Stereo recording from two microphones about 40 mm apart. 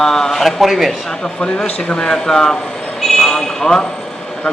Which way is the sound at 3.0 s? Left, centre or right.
Centre.